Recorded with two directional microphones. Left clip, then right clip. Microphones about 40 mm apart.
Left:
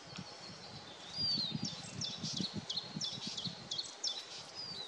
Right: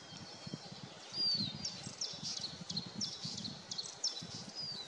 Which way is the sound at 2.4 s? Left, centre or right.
Left.